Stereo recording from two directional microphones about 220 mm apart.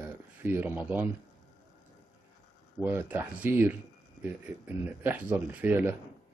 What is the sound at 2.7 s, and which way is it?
Speech, 10° right (ahead or behind).